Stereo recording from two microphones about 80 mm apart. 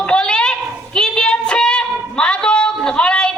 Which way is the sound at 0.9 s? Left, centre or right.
Centre.